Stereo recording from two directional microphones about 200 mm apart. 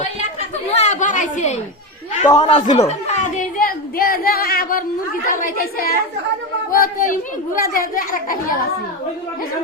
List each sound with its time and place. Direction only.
0.7 s chatter: 35° left (ahead or behind)
2.2 s a child's voice: 20° left (ahead or behind); by 8.5 s 45° left (ahead or behind)